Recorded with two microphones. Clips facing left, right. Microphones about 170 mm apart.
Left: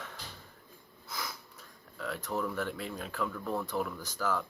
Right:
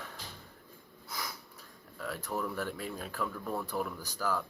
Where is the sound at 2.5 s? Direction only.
40° right (ahead or behind).